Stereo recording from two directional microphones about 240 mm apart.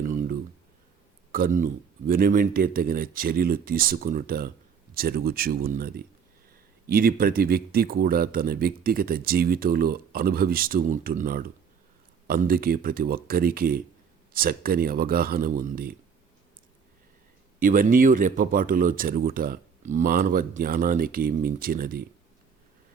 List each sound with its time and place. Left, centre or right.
0.0 s a sound: right
1.3 s speech: right
17.6 s speech: right